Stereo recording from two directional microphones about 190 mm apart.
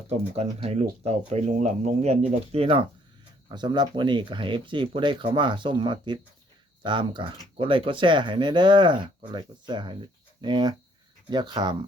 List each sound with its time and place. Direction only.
0.1 s speech: 35° right (ahead or behind)